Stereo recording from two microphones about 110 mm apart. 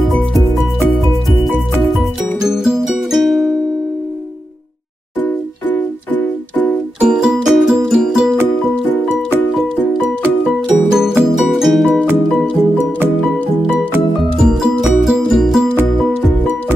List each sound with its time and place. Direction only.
2.4 s music: 5° right (ahead or behind)
5.2 s music: 15° left (ahead or behind)
7.0 s music: 10° right (ahead or behind)
10.9 s music: 5° right (ahead or behind)
14.5 s music: centre (ahead or behind)